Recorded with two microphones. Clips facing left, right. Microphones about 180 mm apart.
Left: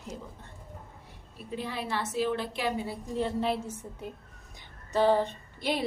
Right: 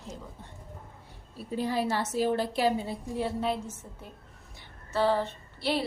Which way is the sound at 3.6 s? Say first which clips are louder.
Left 4 dB; 10° left (ahead or behind).